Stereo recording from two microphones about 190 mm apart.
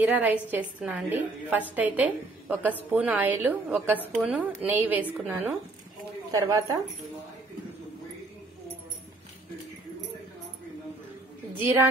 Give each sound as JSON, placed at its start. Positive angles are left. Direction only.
{"t": 0.0, "sound": "a woman's voice", "side_deg": -10}